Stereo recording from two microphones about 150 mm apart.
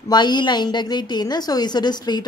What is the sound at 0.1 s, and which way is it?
A woman's voice, 30° left (ahead or behind).